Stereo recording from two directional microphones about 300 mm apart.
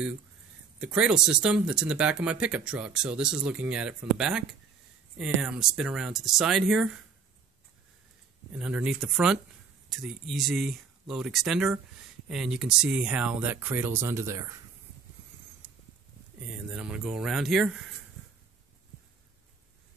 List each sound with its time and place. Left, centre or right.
0.7 s speech: centre
8.5 s speech: centre
16.7 s speech: centre